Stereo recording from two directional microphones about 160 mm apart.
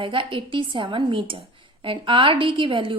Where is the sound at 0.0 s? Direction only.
30° right (ahead or behind).